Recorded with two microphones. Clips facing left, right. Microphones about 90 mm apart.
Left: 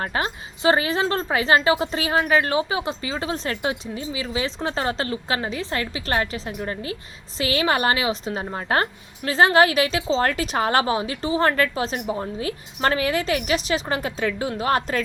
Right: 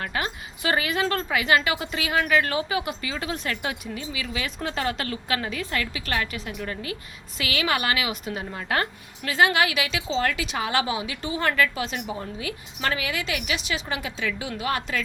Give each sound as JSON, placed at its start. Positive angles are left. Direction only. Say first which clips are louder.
{"t": 0.0, "sound": "speech", "louder": "left 3 dB", "side_deg": 30}